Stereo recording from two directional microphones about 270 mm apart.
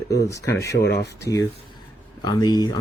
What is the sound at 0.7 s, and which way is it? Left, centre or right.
Speech, left.